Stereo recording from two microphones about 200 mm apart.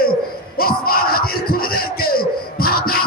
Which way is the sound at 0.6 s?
45° left (ahead or behind).